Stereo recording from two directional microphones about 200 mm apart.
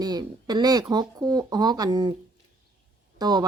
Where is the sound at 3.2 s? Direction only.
20° right (ahead or behind).